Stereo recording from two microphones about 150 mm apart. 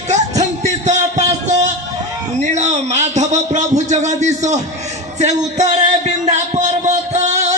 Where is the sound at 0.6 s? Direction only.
50° right (ahead or behind).